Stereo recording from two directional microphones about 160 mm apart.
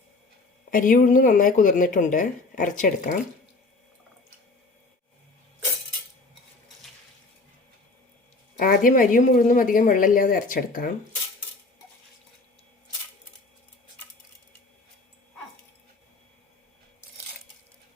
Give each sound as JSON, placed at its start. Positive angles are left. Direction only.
{"t": 0.7, "sound": "speech", "side_deg": 60}
{"t": 8.5, "sound": "speech", "side_deg": 60}